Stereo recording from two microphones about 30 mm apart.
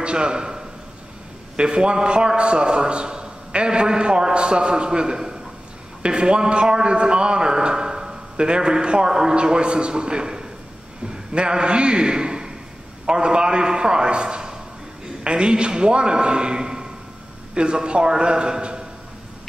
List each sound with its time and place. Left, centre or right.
0.0 s a man's voice: right